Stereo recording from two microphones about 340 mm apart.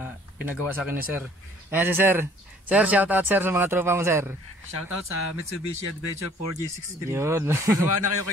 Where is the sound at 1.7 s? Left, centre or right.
Centre.